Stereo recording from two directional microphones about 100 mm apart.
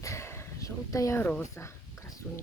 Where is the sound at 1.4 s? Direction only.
30° left (ahead or behind).